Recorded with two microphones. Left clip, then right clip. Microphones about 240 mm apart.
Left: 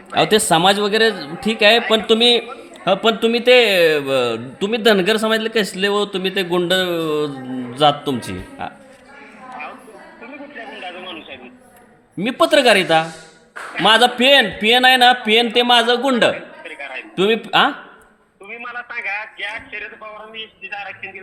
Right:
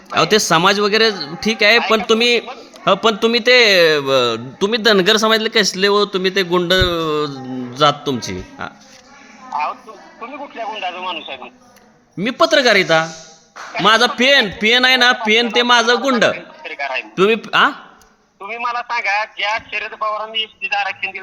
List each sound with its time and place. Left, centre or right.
0.3 s a man's voice: right
9.5 s music: centre
10.8 s radio: centre
12.2 s a man's voice: right